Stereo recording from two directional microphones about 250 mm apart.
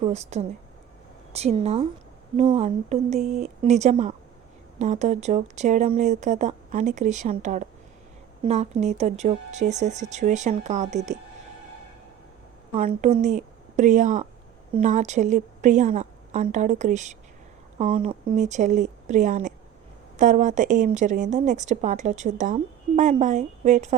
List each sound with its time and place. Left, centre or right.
0.0 s a woman's voice: right
12.7 s a woman's voice: right